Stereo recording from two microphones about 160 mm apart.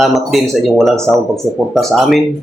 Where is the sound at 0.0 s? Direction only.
Centre (ahead or behind).